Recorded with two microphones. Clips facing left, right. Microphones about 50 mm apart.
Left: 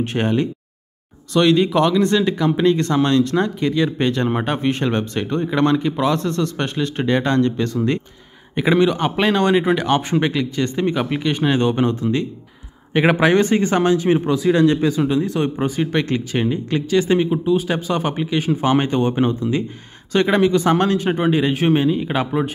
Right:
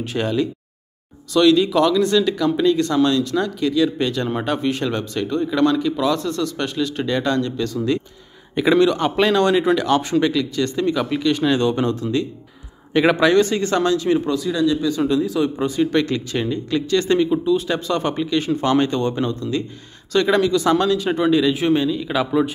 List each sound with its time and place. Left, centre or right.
0.0 s speech: left
8.5 s speech: centre
14.5 s speech: left
15.0 s speech: centre
16.9 s speech: centre; by 21.1 s left
21.1 s speech: left
22.1 s speech: centre